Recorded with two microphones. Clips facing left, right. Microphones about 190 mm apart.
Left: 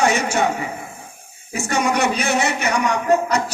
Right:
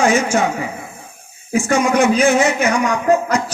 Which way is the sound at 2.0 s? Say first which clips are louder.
Right 6 dB; 65° left (ahead or behind).